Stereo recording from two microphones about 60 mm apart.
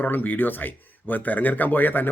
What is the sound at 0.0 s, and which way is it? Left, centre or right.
Speech, left.